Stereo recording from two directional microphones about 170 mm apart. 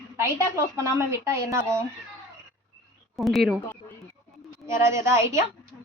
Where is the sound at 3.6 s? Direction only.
10° left (ahead or behind).